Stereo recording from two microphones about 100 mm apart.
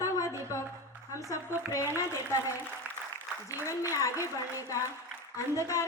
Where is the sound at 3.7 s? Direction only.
30° left (ahead or behind).